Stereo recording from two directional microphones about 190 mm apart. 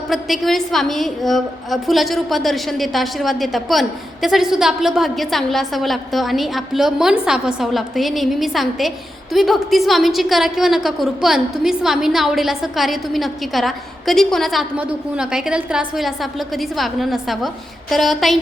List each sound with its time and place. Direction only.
0.1 s a woman's voice: centre (ahead or behind)